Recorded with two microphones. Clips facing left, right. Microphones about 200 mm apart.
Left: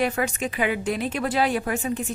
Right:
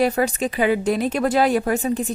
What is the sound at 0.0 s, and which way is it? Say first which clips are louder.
A woman's voice: right 5 dB; 35° right (ahead or behind).